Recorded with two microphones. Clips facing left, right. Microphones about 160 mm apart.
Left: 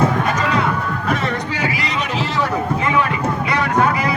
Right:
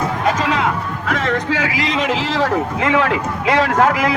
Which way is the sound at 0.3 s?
90° right.